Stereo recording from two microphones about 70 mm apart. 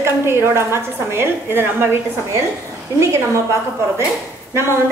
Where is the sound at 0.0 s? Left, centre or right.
Right.